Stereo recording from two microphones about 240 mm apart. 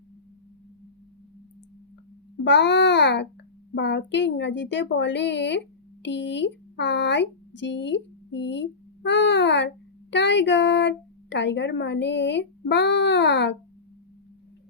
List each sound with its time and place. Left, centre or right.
2.4 s a child's voice: left